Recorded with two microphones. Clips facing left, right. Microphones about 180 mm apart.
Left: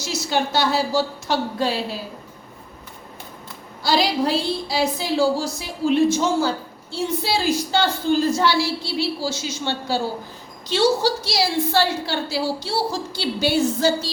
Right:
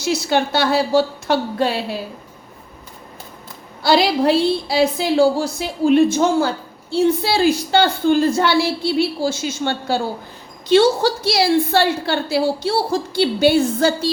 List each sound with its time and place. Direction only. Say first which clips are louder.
0.0 s a woman's voice: right 5 dB; 60° right (ahead or behind)
3.8 s a woman's voice: right 5 dB; 60° right (ahead or behind)